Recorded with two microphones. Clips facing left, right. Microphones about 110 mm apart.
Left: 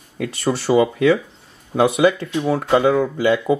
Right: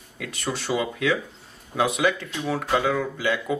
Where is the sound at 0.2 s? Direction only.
30° left (ahead or behind).